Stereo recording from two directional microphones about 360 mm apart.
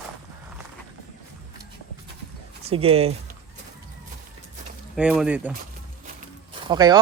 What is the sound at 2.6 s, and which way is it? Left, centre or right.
Speech, centre.